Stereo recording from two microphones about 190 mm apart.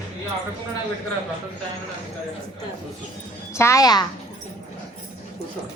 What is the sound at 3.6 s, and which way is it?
Speech, 15° left (ahead or behind).